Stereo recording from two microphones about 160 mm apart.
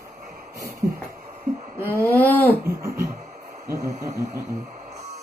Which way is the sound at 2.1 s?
10° left (ahead or behind).